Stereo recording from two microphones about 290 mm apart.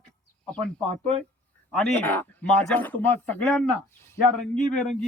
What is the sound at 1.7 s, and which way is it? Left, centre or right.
Speech, centre.